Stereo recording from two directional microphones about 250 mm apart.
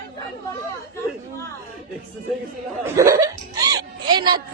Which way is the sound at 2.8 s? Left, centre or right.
Centre.